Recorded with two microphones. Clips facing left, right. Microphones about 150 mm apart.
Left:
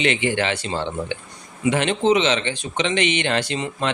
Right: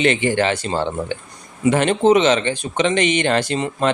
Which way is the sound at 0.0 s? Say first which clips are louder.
Right 4 dB; 40° right (ahead or behind).